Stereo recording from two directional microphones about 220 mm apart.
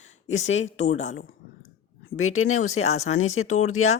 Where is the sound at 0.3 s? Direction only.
60° left (ahead or behind).